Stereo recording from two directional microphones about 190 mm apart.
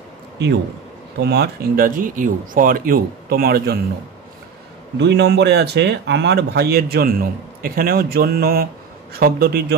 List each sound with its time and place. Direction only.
1.2 s speech: 60° right (ahead or behind)
4.9 s speech: 65° right (ahead or behind)